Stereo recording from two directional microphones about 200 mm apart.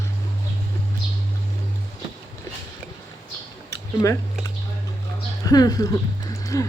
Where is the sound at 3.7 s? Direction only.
15° left (ahead or behind).